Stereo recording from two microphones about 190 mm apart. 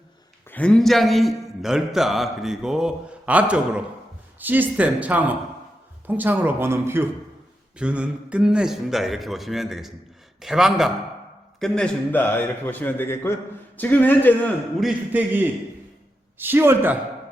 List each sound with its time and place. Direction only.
0.4 s a man's voice: 10° left (ahead or behind)
14.8 s speech: 5° right (ahead or behind)